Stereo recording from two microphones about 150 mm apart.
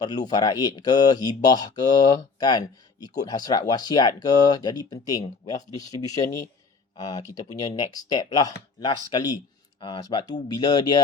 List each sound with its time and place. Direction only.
0.0 s speech: 25° left (ahead or behind)